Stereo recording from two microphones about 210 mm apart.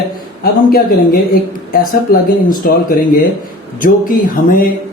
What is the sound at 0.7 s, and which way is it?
Speech, 45° left (ahead or behind).